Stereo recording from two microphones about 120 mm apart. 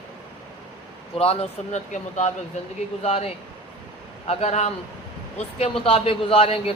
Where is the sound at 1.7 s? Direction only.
85° left.